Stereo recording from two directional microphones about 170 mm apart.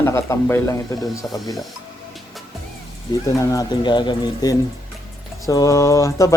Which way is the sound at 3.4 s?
20° left (ahead or behind).